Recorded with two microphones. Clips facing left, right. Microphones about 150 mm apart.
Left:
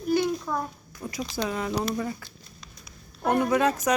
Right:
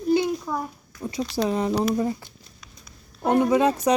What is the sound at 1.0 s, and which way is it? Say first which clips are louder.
Speech: right 5 dB; 30° right (ahead or behind).